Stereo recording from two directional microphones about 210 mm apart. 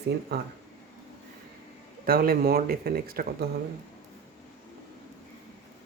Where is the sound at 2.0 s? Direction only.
45° right (ahead or behind).